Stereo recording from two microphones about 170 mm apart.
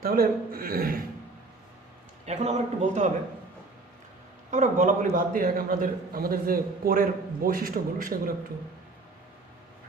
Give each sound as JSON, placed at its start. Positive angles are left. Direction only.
{"t": 0.0, "sound": "a man's voice", "side_deg": -60}
{"t": 2.2, "sound": "a man's voice", "side_deg": -40}
{"t": 4.5, "sound": "a man's voice", "side_deg": -50}